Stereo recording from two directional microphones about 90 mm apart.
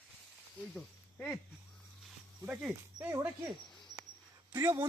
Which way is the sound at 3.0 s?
30° right (ahead or behind).